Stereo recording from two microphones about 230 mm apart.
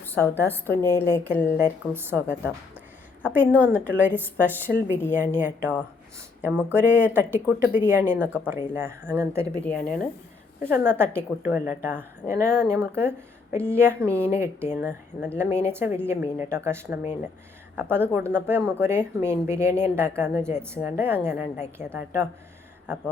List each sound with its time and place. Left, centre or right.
0.0 s a woman's voice: centre
1.6 s speech: centre
9.6 s speech: centre
10.6 s speech: centre